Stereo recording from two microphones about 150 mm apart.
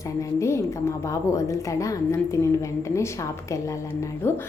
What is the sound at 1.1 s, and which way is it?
A woman's voice, 20° left (ahead or behind).